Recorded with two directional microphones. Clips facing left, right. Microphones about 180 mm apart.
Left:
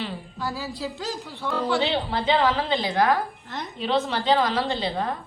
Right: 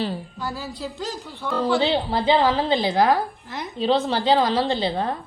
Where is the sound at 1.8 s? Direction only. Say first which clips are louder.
Right 3 dB; 30° right (ahead or behind).